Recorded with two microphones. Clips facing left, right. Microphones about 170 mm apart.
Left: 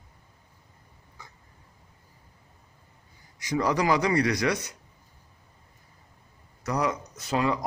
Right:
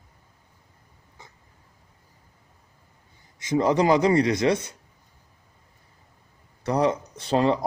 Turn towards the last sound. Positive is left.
turn(degrees=-30)  # may be behind; listen again after turning